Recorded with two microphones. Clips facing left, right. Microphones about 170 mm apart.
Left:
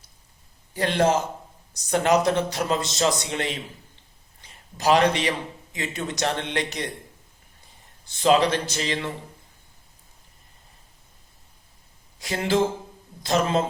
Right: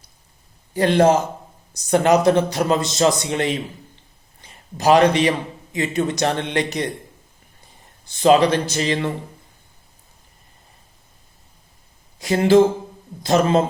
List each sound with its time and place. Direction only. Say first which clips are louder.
0.8 s a man's voice: right 6 dB; 50° right (ahead or behind)
4.8 s a man's voice: right 5 dB; 50° right (ahead or behind)
8.2 s a man's voice: right 5 dB; 45° right (ahead or behind)
12.2 s a man's voice: right 9 dB; 50° right (ahead or behind)